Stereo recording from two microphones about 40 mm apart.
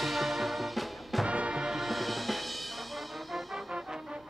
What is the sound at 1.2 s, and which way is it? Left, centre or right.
Music, right.